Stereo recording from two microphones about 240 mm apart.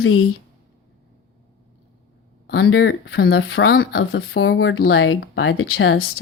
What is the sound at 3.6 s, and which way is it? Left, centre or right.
Speech, left.